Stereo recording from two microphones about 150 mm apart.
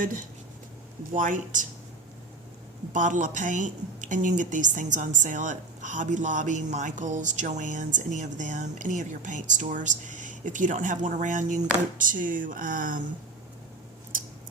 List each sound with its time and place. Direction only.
0.0 s a woman's voice: 65° right (ahead or behind)
2.9 s a woman's voice: 55° right (ahead or behind)